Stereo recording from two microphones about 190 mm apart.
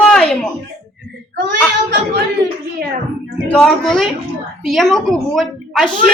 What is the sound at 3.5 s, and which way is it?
A man's voice, 5° left (ahead or behind).